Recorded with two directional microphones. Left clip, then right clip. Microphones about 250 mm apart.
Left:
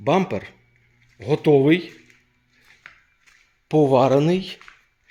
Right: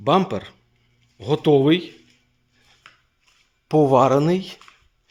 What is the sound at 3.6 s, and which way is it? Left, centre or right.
Speech, centre.